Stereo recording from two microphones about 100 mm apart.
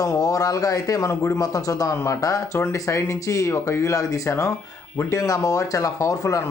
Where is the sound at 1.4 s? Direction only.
35° left (ahead or behind).